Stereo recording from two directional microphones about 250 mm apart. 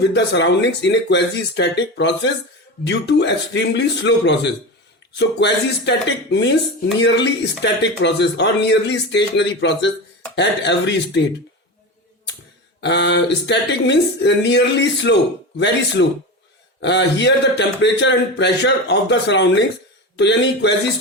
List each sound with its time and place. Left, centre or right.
0.1 s speech: left
12.8 s speech: left